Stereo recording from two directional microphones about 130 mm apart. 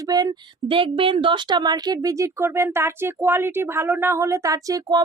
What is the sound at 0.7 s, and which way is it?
A woman's voice, 40° right (ahead or behind).